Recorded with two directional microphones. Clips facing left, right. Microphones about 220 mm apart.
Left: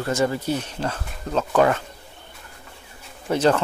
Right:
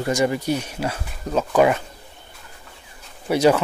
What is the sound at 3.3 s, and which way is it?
Speech, 10° right (ahead or behind).